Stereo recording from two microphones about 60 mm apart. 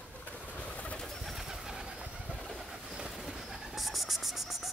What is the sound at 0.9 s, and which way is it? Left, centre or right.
Bird, centre.